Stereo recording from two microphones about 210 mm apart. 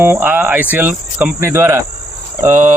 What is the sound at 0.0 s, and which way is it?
Speech, 10° right (ahead or behind).